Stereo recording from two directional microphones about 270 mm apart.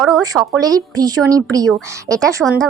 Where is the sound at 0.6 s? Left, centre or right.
Centre.